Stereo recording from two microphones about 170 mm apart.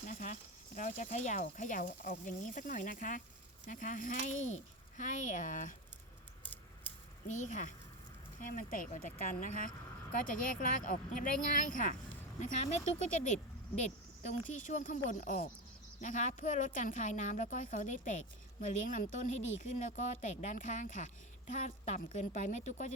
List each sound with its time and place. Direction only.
0.1 s speech: 45° left (ahead or behind)
7.3 s speech: 45° left (ahead or behind)